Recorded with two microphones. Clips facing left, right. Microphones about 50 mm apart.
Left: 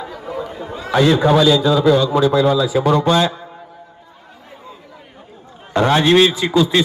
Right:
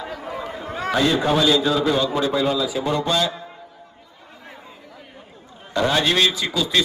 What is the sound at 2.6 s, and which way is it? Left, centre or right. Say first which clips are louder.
Speech: left 7 dB; left.